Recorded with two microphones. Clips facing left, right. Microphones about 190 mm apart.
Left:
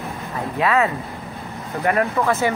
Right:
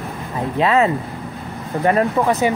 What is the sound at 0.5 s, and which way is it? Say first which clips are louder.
Speech: right 3 dB; 25° right (ahead or behind).